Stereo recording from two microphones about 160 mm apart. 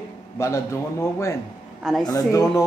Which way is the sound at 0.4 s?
15° left (ahead or behind).